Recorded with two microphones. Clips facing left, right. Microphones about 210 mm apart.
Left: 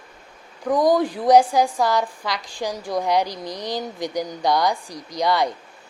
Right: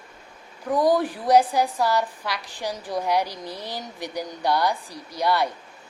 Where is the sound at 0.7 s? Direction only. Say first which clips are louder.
Left 2 dB; 15° left (ahead or behind).